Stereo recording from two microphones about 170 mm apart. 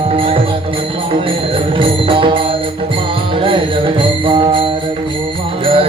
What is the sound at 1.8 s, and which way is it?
Music, 30° right (ahead or behind).